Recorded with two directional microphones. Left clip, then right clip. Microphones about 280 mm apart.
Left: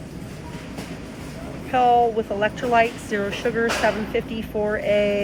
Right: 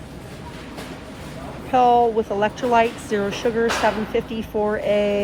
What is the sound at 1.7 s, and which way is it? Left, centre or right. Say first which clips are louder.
Speech: right 2 dB; centre.